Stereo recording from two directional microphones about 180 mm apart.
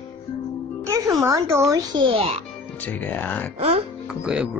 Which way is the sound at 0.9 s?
20° right (ahead or behind).